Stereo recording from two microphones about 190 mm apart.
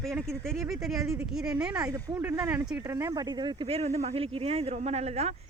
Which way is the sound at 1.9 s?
20° right (ahead or behind).